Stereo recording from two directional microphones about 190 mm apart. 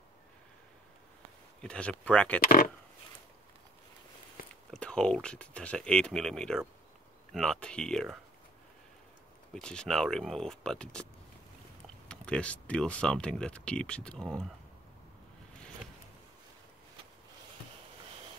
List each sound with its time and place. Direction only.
1.6 s speech: 5° left (ahead or behind)
2.4 s speech: 50° left (ahead or behind)
4.6 s speech: 5° left (ahead or behind)
9.5 s speech: 5° left (ahead or behind)
12.1 s speech: 5° left (ahead or behind)